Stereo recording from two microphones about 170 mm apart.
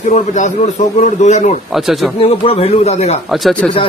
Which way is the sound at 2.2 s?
35° left (ahead or behind).